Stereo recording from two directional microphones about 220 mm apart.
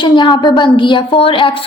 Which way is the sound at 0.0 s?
20° left (ahead or behind).